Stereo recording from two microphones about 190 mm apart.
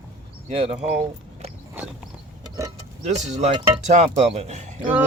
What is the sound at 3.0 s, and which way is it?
Speech, 35° right (ahead or behind).